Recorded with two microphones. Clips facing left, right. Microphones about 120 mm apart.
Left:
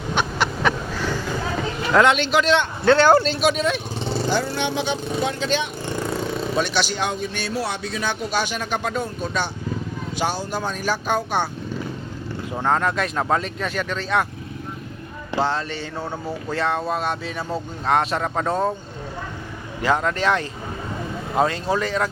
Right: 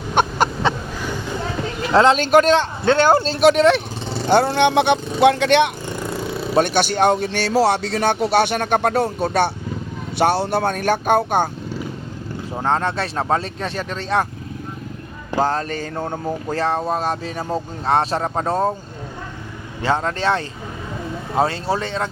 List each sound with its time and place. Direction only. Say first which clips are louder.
0.1 s a sound: right 5 dB; 45° right (ahead or behind)
1.9 s speech: right 4 dB; 30° right (ahead or behind)
2.8 s a man's voice: left 2 dB; 25° right (ahead or behind)
3.4 s a man's voice: right 7 dB; 65° right (ahead or behind)
6.6 s a man's voice: right 8 dB; 50° right (ahead or behind)
12.6 s speech: right 1 dB; 30° right (ahead or behind)
15.4 s speech: right 3 dB; 40° right (ahead or behind)
19.8 s speech: right 1 dB; 30° right (ahead or behind)